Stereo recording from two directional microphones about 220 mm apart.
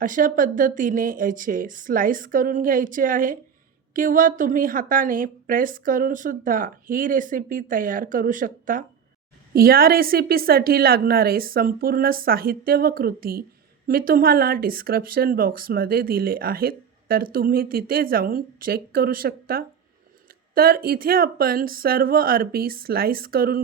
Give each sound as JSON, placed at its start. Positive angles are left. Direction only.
{"t": 0.0, "sound": "a woman's voice", "side_deg": -40}